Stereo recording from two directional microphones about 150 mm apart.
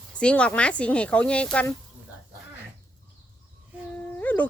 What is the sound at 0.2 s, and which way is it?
Speech, 5° left (ahead or behind).